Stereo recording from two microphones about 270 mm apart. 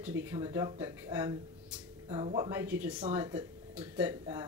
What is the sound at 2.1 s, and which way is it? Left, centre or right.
Speech, centre.